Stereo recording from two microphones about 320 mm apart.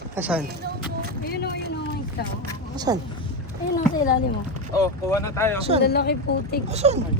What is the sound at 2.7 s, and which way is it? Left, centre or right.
Speech, centre.